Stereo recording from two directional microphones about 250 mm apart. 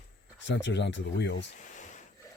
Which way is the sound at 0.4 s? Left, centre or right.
Left.